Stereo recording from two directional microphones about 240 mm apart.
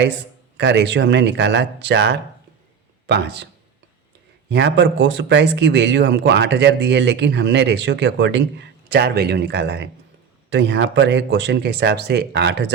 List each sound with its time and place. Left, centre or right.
0.5 s speech: right